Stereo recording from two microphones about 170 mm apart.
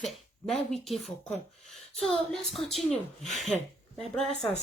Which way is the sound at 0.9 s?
Centre (ahead or behind).